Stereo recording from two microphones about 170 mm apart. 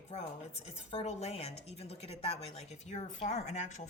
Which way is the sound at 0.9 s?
40° left (ahead or behind).